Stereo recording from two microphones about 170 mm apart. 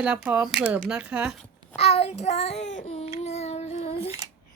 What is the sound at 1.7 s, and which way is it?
Child singing, 40° left (ahead or behind).